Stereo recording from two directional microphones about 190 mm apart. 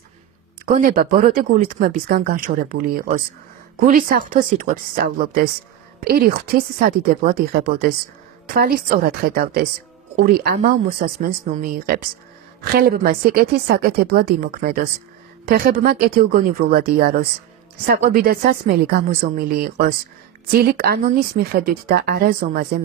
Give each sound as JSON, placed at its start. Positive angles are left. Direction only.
{"t": 0.7, "sound": "speech", "side_deg": -45}